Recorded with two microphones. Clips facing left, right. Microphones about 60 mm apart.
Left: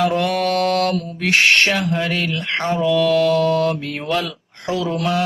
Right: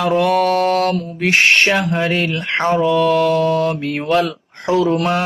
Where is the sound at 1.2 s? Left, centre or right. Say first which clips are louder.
Right 2 dB; centre.